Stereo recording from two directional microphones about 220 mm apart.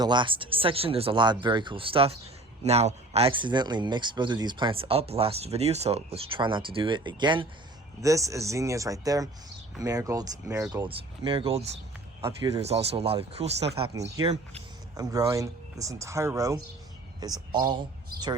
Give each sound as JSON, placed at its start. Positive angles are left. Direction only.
{"t": 0.0, "sound": "speech", "side_deg": -20}
{"t": 10.8, "sound": "speech", "side_deg": -20}